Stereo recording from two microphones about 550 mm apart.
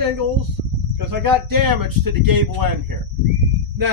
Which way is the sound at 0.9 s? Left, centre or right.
Right.